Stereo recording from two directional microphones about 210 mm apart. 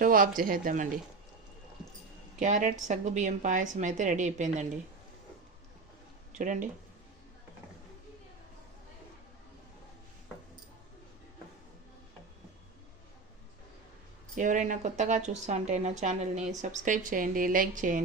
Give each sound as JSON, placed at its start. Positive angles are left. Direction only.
{"t": 0.0, "sound": "a woman's voice", "side_deg": -40}
{"t": 2.4, "sound": "a woman's voice", "side_deg": -35}
{"t": 6.4, "sound": "a woman's voice", "side_deg": -35}
{"t": 14.3, "sound": "a woman's voice", "side_deg": -35}